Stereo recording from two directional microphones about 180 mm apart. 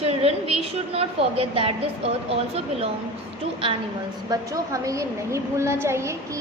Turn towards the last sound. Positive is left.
turn(degrees=-15)  # may be behind; listen again after turning